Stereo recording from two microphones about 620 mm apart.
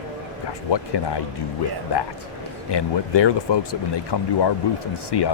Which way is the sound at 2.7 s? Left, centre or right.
Left.